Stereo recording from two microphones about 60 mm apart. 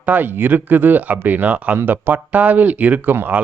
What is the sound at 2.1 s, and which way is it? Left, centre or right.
Speech, right.